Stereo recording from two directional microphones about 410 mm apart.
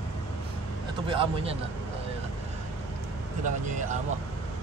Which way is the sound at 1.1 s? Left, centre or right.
Centre.